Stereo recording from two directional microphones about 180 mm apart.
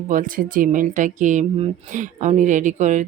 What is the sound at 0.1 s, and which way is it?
Speech, 50° right (ahead or behind).